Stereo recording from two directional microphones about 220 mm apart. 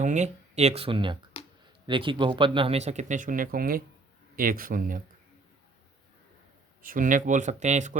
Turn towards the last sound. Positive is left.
turn(degrees=-35)  # may be behind; listen again after turning